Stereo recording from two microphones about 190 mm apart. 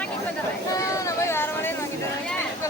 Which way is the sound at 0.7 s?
15° left (ahead or behind).